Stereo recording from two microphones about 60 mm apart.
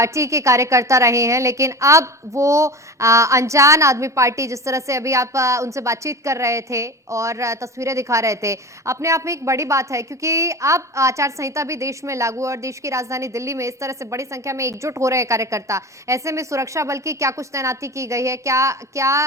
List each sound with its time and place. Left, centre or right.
0.0 s a woman's voice: right